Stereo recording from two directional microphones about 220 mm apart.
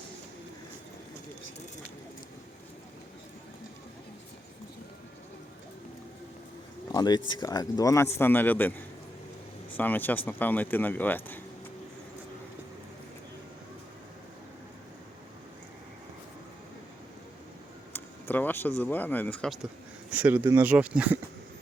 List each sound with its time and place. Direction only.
6.9 s a man's voice: 20° left (ahead or behind)
9.7 s a man's voice: 10° left (ahead or behind)
17.9 s a sound: 10° left (ahead or behind)
18.8 s a man's voice: 10° left (ahead or behind)
20.1 s speech: 5° right (ahead or behind)